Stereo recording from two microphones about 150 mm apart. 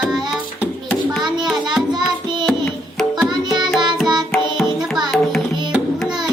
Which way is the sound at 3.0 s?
Centre (ahead or behind).